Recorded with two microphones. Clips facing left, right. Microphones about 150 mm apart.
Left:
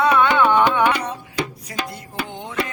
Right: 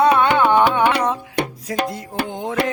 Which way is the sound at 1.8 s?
65° right (ahead or behind).